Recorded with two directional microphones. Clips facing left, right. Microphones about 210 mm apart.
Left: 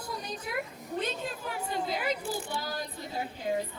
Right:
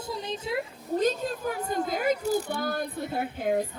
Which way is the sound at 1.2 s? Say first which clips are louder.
Right 6 dB; 45° right (ahead or behind).